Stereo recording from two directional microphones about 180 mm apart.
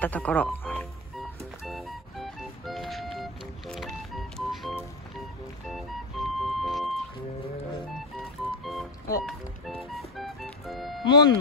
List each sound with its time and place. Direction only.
0.0 s speech: 10° left (ahead or behind)
1.6 s music: centre (ahead or behind)
8.2 s music: centre (ahead or behind)
11.1 s speech: 25° left (ahead or behind)